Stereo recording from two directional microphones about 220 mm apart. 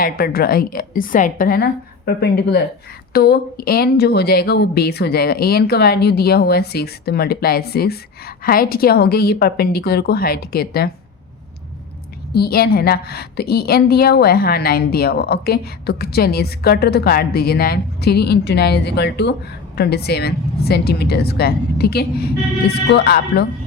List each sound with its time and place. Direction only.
0.0 s a woman's voice: 40° left (ahead or behind)
12.3 s a woman's voice: 45° left (ahead or behind)